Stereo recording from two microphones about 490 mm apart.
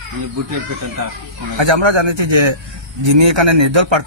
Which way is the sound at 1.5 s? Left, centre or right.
Right.